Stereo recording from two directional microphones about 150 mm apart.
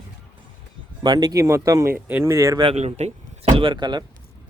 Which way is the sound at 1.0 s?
25° right (ahead or behind).